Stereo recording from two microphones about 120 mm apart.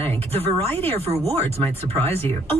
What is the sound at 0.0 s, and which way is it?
A woman's voice, 55° right (ahead or behind).